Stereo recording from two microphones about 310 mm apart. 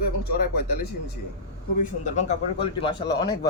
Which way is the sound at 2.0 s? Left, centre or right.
Left.